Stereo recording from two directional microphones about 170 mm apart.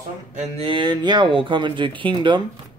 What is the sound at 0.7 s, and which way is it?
Speech, 25° right (ahead or behind).